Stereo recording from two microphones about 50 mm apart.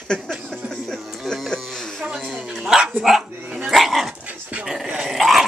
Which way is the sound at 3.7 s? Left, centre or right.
Centre.